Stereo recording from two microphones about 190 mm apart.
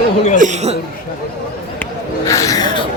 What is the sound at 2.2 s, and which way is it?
Speech, 15° left (ahead or behind).